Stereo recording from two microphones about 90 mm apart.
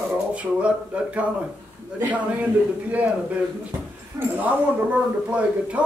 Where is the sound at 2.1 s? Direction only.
15° right (ahead or behind).